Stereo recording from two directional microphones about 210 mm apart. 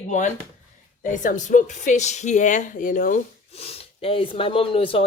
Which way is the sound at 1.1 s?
35° left (ahead or behind).